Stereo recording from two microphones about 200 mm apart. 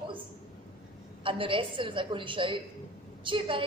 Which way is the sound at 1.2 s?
25° right (ahead or behind).